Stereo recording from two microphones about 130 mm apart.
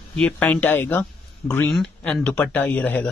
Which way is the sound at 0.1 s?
10° left (ahead or behind).